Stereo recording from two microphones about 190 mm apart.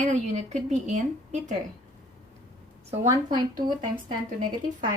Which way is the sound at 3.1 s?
20° right (ahead or behind).